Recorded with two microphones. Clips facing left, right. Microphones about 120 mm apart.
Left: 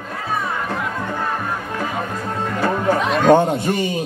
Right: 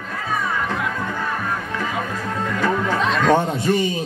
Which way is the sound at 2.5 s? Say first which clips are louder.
Left 3 dB; 40° left (ahead or behind).